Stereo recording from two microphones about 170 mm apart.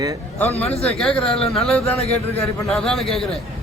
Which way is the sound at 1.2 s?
35° left (ahead or behind).